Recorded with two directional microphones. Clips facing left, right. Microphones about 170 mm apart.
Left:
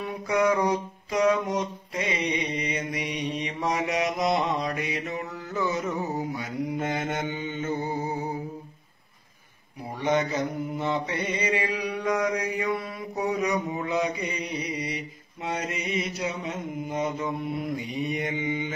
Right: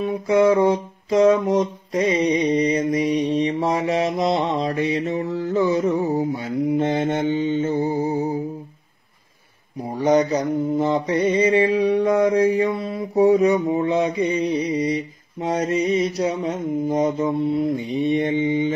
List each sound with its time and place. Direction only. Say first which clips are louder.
0.0 s mantra: right 8 dB; 25° right (ahead or behind)
9.8 s mantra: right 8 dB; 40° right (ahead or behind)